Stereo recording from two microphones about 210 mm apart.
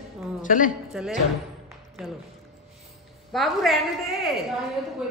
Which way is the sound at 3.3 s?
Centre (ahead or behind).